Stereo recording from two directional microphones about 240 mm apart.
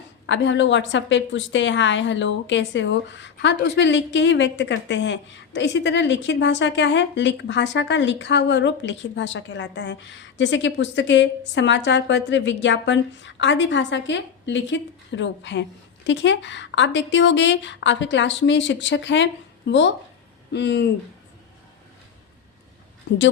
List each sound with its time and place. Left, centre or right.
0.3 s a woman's voice: left